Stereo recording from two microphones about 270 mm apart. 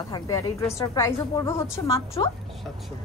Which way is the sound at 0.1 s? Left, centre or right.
Centre.